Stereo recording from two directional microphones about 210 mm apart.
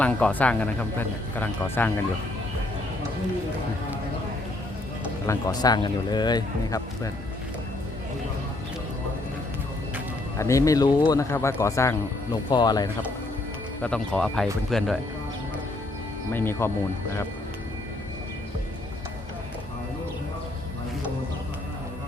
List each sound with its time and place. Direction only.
0.0 s speech: 5° left (ahead or behind)
5.2 s a man's voice: 15° left (ahead or behind)
10.3 s speech: 15° left (ahead or behind)
13.8 s speech: 5° left (ahead or behind)
16.3 s speech: 10° left (ahead or behind)